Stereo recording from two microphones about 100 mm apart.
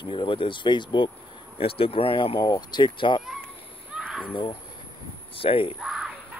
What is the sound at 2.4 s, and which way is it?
Speech, 45° left (ahead or behind).